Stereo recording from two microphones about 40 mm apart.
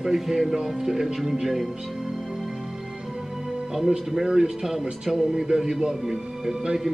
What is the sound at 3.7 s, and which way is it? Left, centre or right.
A man's voice, centre.